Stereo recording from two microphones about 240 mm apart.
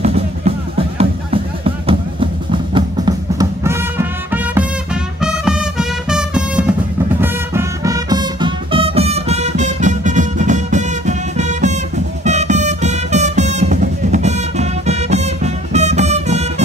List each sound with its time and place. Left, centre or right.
0.0 s music: right